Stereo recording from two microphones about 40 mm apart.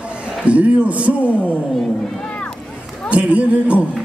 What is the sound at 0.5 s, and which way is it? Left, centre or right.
Speech, right.